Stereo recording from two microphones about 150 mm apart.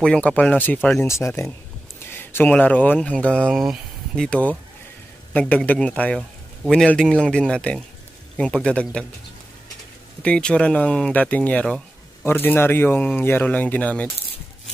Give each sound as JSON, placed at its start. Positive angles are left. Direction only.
{"t": 0.0, "sound": "speech", "side_deg": 5}
{"t": 10.2, "sound": "speech", "side_deg": 5}